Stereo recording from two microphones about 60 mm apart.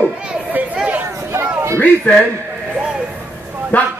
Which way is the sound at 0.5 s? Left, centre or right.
Right.